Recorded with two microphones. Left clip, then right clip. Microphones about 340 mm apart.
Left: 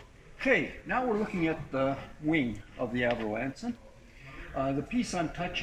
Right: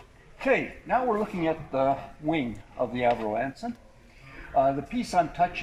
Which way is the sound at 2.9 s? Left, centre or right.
Centre.